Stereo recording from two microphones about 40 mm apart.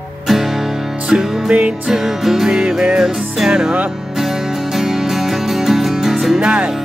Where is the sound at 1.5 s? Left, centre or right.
Right.